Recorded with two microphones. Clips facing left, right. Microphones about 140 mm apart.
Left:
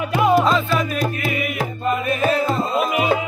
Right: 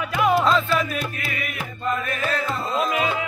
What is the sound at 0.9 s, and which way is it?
Music, 45° left (ahead or behind).